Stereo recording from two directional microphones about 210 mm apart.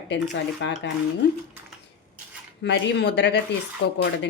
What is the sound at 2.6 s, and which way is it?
Speech, 55° left (ahead or behind).